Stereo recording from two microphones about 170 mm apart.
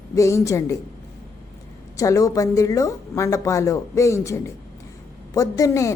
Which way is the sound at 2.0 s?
20° left (ahead or behind).